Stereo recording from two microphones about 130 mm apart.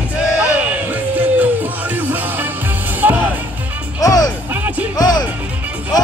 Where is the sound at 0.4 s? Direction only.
10° right (ahead or behind).